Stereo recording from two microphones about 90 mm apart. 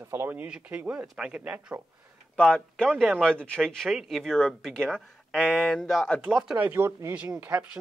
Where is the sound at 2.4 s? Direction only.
10° left (ahead or behind).